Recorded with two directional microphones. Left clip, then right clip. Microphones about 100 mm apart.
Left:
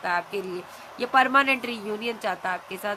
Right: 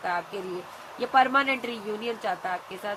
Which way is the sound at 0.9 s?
30° left (ahead or behind).